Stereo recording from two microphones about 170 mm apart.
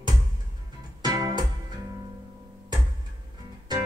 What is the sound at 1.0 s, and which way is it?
Music, 25° right (ahead or behind).